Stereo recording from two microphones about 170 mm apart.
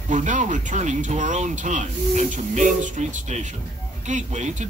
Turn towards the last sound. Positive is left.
turn(degrees=-45)  # may be behind; listen again after turning